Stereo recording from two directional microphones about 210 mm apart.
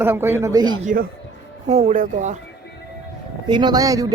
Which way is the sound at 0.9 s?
40° right (ahead or behind).